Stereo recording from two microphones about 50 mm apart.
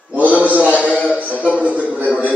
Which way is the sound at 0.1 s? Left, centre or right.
Right.